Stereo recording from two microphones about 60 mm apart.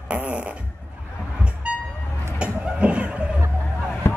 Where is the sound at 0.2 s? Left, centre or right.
Right.